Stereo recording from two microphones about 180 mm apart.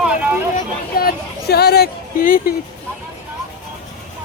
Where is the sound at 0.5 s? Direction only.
55° left (ahead or behind).